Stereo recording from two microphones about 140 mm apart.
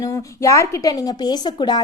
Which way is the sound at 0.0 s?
20° left (ahead or behind).